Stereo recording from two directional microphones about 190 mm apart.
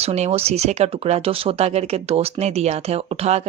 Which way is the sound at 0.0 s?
35° right (ahead or behind).